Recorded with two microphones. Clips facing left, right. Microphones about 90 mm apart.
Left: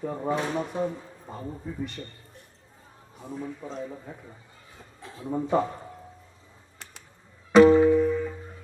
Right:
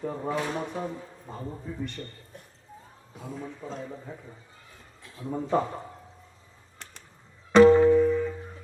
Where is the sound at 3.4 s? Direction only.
5° left (ahead or behind).